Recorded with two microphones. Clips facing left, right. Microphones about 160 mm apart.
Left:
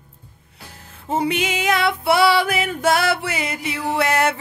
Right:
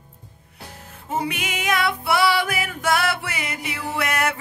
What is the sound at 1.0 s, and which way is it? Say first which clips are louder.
Music: left 5 dB; 30° left (ahead or behind).